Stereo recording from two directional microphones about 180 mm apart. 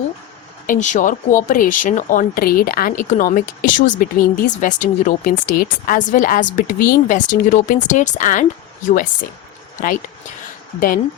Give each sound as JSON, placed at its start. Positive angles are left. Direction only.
{"t": 0.7, "sound": "speech", "side_deg": 45}
{"t": 10.8, "sound": "speech", "side_deg": 50}